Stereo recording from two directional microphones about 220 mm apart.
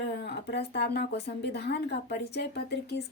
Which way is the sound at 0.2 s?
50° left (ahead or behind).